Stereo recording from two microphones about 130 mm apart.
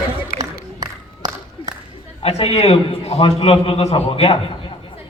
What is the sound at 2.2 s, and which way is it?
A man's voice, 50° left (ahead or behind).